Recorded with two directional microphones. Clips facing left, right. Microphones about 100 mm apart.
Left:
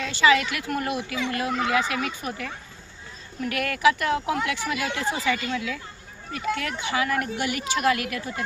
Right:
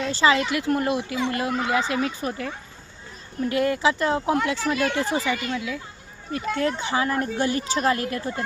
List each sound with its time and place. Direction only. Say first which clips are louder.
0.0 s speech: even; 30° right (ahead or behind)
6.3 s speech: right 4 dB; 30° right (ahead or behind)